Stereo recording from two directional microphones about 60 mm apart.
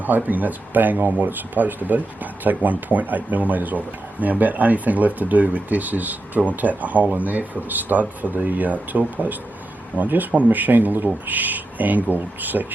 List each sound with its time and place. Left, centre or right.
0.0 s speech: right